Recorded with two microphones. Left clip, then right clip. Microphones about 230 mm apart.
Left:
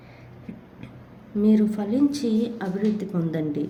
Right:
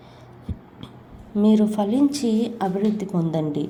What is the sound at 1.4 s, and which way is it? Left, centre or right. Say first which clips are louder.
A woman's voice: right 3 dB; centre.